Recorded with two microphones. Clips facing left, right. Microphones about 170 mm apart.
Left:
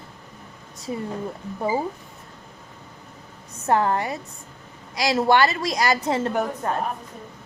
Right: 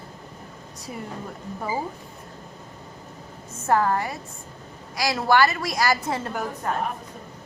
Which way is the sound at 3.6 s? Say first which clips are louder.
Left 1 dB; 25° left (ahead or behind).